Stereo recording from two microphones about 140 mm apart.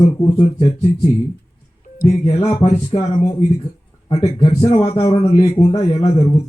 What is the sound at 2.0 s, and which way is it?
Speech, 45° left (ahead or behind).